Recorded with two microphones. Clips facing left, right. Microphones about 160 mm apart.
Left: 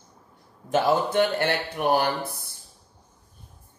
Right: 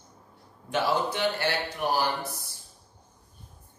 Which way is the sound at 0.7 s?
50° left (ahead or behind).